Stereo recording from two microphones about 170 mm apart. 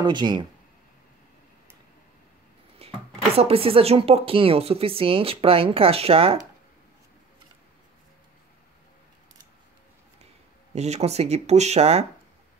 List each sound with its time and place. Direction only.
0.0 s speech: 25° right (ahead or behind)
2.8 s a sound: 35° right (ahead or behind)
3.3 s speech: 35° right (ahead or behind)
10.7 s speech: 40° right (ahead or behind)